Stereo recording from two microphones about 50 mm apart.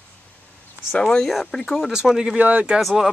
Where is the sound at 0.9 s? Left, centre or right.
Centre.